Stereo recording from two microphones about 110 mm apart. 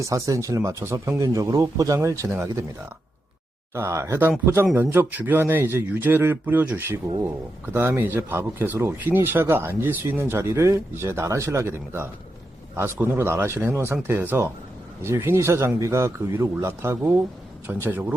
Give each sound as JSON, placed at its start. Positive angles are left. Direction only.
{"t": 0.0, "sound": "speech", "side_deg": -30}
{"t": 3.8, "sound": "speech", "side_deg": -25}